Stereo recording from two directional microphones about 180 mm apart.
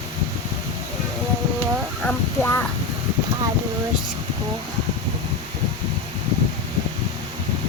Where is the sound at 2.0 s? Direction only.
10° left (ahead or behind).